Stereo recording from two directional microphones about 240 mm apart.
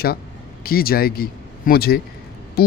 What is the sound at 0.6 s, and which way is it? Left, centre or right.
A man's voice, left.